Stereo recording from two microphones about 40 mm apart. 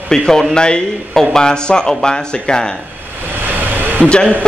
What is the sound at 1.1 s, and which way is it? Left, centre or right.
Speech, centre.